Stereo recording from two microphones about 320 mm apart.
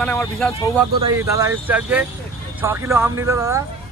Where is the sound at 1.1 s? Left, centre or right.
Centre.